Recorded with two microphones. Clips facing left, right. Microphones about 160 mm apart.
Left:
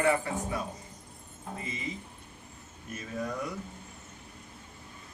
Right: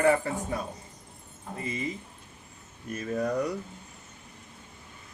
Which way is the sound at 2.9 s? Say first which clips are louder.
Right 7 dB; 45° right (ahead or behind).